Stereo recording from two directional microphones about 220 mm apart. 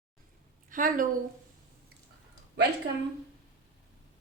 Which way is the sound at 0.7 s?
40° right (ahead or behind).